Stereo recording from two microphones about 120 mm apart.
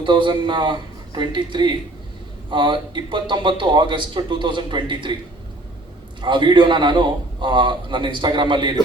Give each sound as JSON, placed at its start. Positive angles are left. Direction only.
{"t": 0.0, "sound": "speech", "side_deg": -40}
{"t": 6.2, "sound": "speech", "side_deg": -40}